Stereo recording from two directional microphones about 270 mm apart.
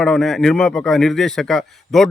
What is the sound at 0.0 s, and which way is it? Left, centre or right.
Speech, centre.